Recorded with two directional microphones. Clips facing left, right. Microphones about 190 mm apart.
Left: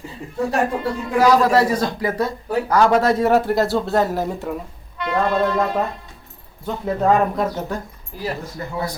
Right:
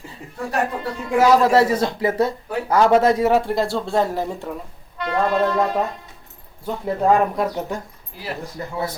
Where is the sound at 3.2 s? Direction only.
Centre (ahead or behind).